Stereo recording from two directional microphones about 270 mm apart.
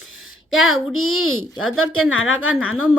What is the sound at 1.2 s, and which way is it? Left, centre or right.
A woman's voice, left.